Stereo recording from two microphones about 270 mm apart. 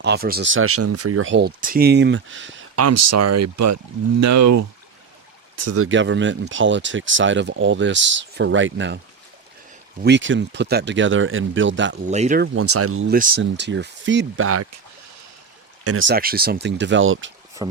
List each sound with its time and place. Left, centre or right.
0.0 s speech: right
2.7 s speech: right
5.5 s speech: right
10.0 s speech: right
12.0 s speech: right
12.5 s speech: right
13.1 s speech: right
15.8 s speech: right
16.0 s speech: right
17.6 s speech: centre